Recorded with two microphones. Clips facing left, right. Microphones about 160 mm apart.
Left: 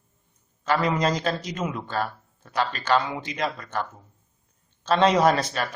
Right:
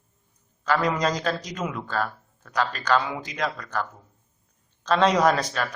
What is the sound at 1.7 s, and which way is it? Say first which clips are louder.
Speech: even; 25° left (ahead or behind).